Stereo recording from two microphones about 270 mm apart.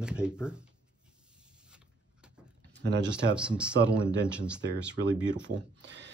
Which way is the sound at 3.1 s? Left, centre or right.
Centre.